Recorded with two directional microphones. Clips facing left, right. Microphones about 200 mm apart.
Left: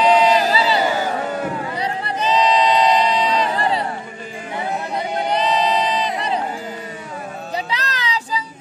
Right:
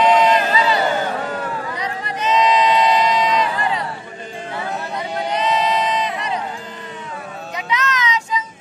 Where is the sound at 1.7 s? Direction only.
30° left (ahead or behind).